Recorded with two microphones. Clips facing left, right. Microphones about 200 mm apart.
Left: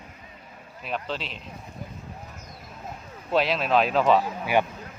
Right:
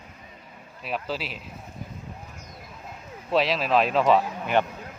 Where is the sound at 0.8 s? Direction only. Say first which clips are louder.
Right 1 dB; 5° right (ahead or behind).